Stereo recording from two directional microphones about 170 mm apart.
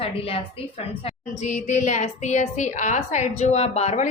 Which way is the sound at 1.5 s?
45° left (ahead or behind).